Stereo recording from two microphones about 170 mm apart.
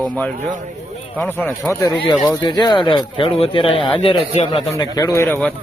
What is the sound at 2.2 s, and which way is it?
Speech, 25° left (ahead or behind).